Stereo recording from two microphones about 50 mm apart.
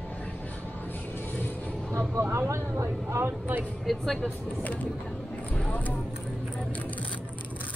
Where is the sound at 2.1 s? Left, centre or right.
Right.